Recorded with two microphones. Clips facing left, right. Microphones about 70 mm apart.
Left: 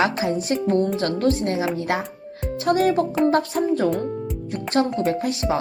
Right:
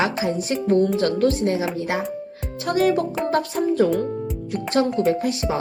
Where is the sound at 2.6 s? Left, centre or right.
Left.